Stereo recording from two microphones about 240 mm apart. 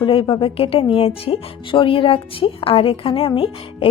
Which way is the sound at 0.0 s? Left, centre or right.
Left.